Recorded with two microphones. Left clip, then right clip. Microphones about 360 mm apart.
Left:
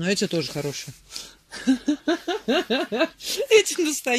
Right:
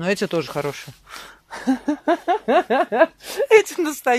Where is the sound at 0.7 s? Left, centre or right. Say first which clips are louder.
Right 2 dB; centre.